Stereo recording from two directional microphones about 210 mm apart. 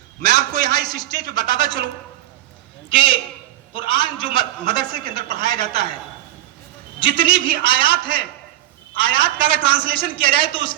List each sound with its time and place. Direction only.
0.5 s a man's voice: 20° left (ahead or behind)
2.9 s a man's voice: 25° left (ahead or behind)
7.0 s a man's voice: 25° left (ahead or behind)